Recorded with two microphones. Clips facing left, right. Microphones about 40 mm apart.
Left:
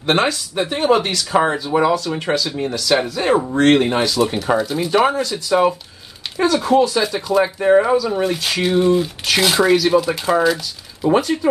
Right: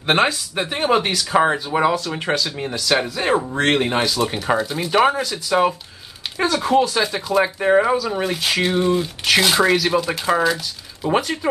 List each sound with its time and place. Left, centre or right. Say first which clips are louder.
0.0 s speech: even; centre
11.1 s speech: left 4 dB; centre